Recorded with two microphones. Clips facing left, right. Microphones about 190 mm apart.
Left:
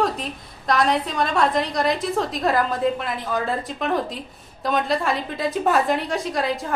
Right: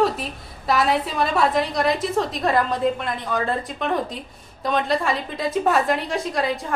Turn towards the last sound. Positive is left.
turn(degrees=0)  # may be behind; listen again after turning